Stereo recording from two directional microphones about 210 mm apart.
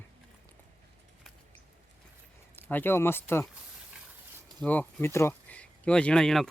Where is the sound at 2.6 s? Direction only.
10° left (ahead or behind).